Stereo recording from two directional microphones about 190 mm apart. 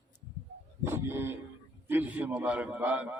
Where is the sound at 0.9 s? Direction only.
10° right (ahead or behind).